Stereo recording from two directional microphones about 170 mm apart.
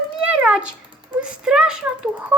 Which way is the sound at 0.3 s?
5° right (ahead or behind).